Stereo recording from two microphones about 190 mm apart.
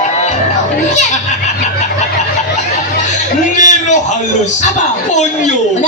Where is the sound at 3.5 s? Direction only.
40° left (ahead or behind).